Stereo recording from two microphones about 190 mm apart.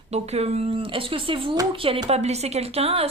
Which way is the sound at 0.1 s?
35° right (ahead or behind).